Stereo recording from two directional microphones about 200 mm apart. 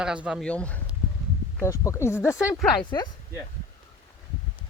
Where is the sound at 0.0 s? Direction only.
5° right (ahead or behind); by 3.1 s 20° left (ahead or behind).